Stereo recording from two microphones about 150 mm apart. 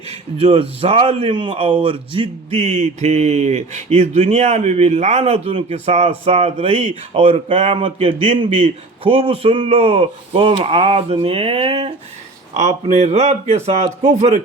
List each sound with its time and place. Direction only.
0.4 s a man's voice: 40° right (ahead or behind)